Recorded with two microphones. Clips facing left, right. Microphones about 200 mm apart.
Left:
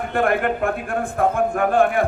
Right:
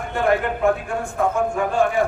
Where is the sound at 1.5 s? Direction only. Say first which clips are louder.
Left 2 dB; 55° left (ahead or behind).